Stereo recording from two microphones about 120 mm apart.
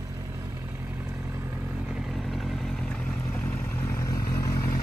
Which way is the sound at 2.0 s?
Centre (ahead or behind).